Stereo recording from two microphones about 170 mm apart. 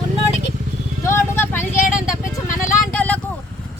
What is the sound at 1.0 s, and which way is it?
Vehicle, 15° left (ahead or behind).